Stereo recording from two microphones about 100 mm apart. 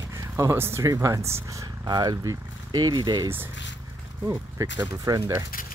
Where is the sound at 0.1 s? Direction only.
30° right (ahead or behind).